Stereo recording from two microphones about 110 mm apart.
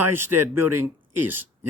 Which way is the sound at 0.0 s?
20° right (ahead or behind).